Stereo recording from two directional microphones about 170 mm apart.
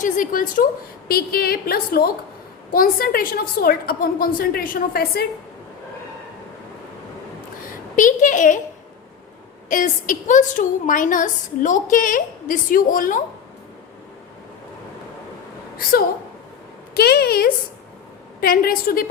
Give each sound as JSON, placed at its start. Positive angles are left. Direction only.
{"t": 0.0, "sound": "a woman's voice", "side_deg": 50}
{"t": 7.9, "sound": "a woman's voice", "side_deg": 50}
{"t": 9.6, "sound": "a woman's voice", "side_deg": 50}
{"t": 16.9, "sound": "a woman's voice", "side_deg": 70}